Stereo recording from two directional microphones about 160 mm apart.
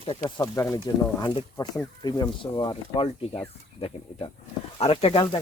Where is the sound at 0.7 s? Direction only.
25° left (ahead or behind).